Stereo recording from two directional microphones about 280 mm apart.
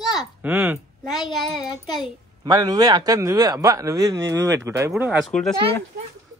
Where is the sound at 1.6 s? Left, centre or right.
Centre.